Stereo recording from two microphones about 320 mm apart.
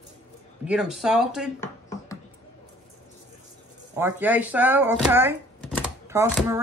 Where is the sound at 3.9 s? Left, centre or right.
Centre.